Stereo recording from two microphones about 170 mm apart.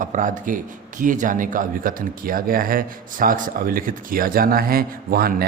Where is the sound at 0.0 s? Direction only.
50° right (ahead or behind).